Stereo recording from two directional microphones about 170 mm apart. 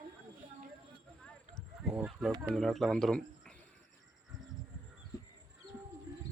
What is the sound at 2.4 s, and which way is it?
Speech, 5° left (ahead or behind).